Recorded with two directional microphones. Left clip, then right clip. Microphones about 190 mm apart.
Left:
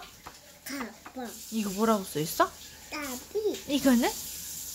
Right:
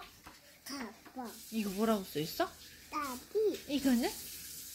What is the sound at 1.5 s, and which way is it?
A child's voice, 10° left (ahead or behind).